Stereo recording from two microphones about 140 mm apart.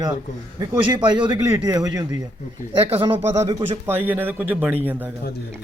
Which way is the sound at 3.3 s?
20° right (ahead or behind).